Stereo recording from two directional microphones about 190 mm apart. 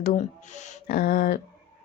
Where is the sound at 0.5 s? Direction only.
50° left (ahead or behind).